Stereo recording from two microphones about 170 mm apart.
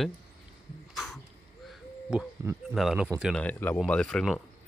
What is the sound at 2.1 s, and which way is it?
Speech, 5° right (ahead or behind).